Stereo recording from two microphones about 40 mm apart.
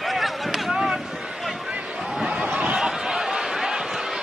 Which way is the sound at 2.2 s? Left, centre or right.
Right.